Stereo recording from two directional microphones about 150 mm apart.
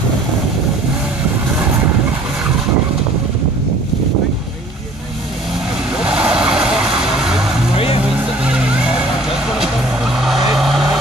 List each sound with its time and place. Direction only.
6.0 s vehicle: 5° right (ahead or behind)
7.7 s music: 40° left (ahead or behind)
10.1 s vehicle: centre (ahead or behind)